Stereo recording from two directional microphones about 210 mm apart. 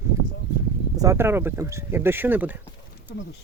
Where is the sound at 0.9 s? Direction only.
15° right (ahead or behind).